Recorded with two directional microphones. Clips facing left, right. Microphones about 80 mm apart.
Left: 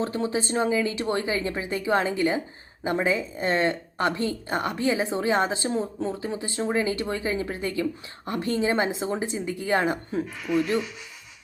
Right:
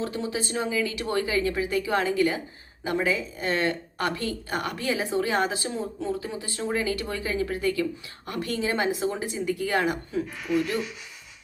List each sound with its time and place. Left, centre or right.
0.0 s speech: left